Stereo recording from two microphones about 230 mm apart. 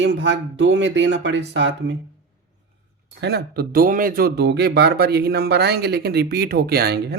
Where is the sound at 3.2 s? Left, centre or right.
Right.